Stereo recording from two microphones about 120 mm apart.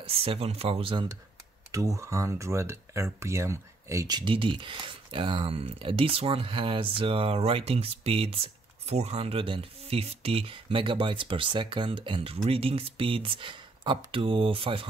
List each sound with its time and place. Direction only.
0.0 s speech: 55° right (ahead or behind)
1.7 s speech: 25° right (ahead or behind)
4.2 s speech: 45° right (ahead or behind)